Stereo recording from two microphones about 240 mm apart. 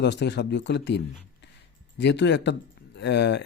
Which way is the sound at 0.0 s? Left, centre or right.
Left.